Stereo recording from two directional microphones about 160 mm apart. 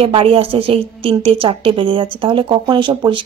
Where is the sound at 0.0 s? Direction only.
35° right (ahead or behind).